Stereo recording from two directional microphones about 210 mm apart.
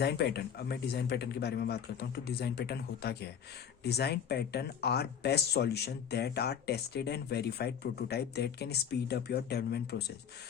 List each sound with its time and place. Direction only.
0.0 s speech: 50° left (ahead or behind)